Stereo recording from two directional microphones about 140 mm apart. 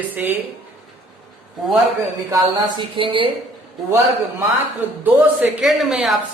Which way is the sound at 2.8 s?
35° right (ahead or behind).